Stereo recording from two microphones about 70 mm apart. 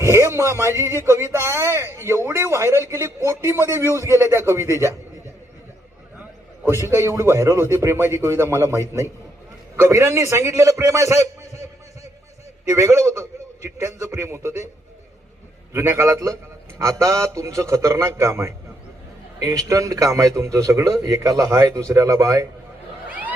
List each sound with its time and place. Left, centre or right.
0.0 s speech: right
6.7 s a man's voice: right
12.6 s a man's voice: right
15.7 s a man's voice: right
19.4 s a man's voice: right